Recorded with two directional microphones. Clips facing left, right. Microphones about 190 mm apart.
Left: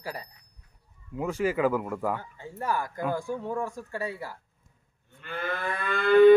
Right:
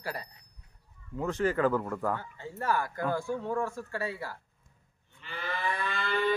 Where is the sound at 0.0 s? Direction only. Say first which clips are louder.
Even; 15° left (ahead or behind).